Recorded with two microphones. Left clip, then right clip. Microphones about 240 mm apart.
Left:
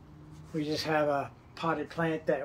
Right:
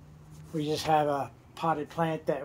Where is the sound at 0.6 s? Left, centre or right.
Right.